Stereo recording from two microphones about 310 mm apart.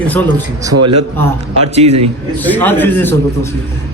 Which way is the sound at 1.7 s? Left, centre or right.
Centre.